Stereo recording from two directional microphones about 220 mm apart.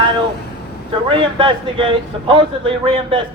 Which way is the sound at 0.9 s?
25° right (ahead or behind).